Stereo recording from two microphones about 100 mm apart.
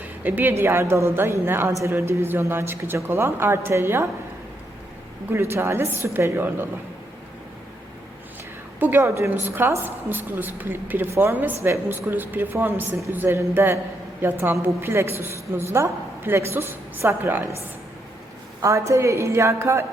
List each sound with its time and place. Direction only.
0.0 s a woman's voice: 20° right (ahead or behind)
5.3 s a woman's voice: 25° right (ahead or behind)
8.8 s a woman's voice: 25° right (ahead or behind)
18.6 s a woman's voice: 30° right (ahead or behind)